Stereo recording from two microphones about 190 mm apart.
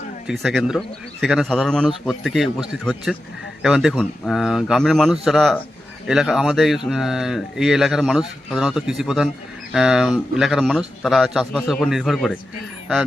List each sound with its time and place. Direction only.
0.3 s speech: centre (ahead or behind)